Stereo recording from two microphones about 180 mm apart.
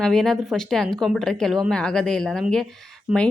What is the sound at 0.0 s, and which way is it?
Speech, 5° left (ahead or behind).